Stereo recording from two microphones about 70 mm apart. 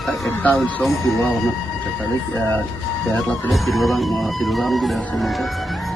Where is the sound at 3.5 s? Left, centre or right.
Centre.